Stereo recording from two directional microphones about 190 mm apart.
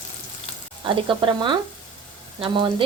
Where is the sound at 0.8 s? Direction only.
25° right (ahead or behind).